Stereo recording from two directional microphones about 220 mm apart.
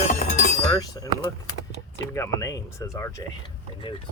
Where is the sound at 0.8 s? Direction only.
15° left (ahead or behind).